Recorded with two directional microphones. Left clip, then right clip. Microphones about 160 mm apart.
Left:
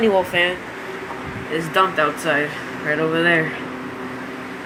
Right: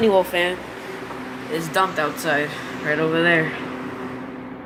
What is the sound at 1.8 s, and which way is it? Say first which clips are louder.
Speech: left 4 dB; 15° right (ahead or behind).